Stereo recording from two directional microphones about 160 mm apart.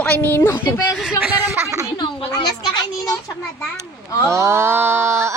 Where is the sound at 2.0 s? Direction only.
25° left (ahead or behind).